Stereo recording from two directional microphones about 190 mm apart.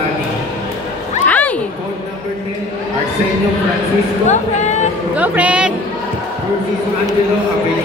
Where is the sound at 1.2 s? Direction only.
10° left (ahead or behind).